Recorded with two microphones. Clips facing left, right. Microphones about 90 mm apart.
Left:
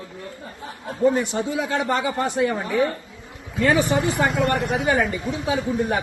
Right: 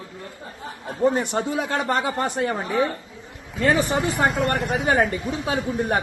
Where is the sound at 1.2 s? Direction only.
45° right (ahead or behind).